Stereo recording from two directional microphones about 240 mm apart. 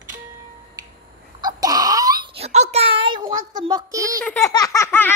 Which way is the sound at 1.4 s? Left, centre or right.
Centre.